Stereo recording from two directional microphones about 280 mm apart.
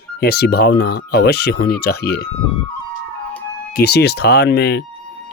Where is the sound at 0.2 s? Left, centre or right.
Left.